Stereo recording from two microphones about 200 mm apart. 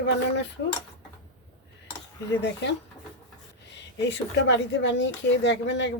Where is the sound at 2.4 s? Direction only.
60° left (ahead or behind).